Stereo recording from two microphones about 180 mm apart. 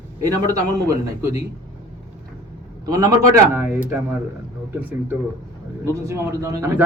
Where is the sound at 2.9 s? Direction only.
20° right (ahead or behind).